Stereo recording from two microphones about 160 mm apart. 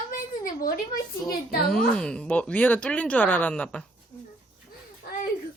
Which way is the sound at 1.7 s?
5° left (ahead or behind).